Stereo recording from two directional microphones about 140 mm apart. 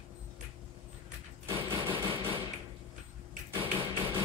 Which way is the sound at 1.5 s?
40° right (ahead or behind).